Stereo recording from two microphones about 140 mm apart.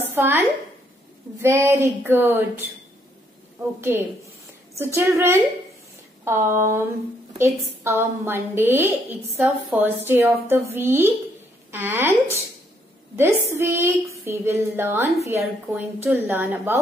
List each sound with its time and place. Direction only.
0.1 s a woman's voice: 15° right (ahead or behind)
3.9 s a woman's voice: 15° right (ahead or behind)
4.9 s a sound: 20° right (ahead or behind)
7.3 s a woman's voice: 20° right (ahead or behind)